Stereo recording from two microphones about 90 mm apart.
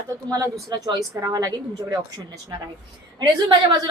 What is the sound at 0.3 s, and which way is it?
A woman's voice, 35° right (ahead or behind).